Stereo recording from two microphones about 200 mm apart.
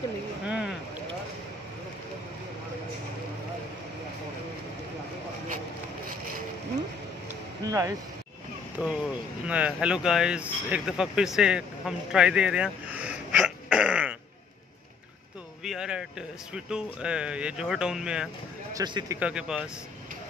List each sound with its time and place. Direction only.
0.5 s a sound: 5° right (ahead or behind)
7.6 s speech: 15° right (ahead or behind)
8.7 s speech: 5° right (ahead or behind)
15.6 s speech: centre (ahead or behind)
18.7 s speech: 15° right (ahead or behind)